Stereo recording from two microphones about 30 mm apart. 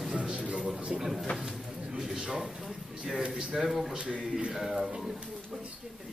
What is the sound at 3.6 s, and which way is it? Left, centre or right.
Speech, centre.